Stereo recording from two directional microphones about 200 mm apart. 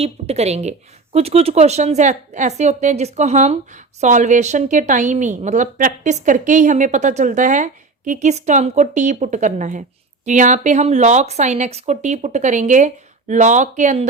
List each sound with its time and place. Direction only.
0.0 s a woman's voice: 30° right (ahead or behind)